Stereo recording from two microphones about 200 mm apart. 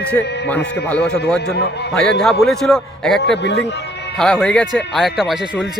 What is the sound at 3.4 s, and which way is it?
Speech, 60° left (ahead or behind).